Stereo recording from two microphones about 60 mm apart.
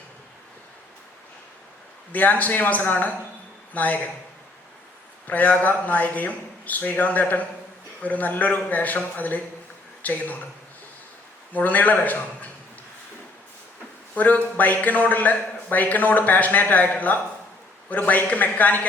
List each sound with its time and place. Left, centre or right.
2.1 s a man's voice: left
5.3 s a man's voice: left
11.5 s a man's voice: left
14.2 s a man's voice: left